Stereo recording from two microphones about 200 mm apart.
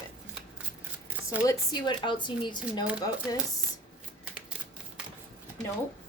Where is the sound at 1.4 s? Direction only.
20° left (ahead or behind).